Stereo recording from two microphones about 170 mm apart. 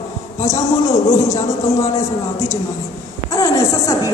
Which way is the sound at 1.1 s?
20° left (ahead or behind).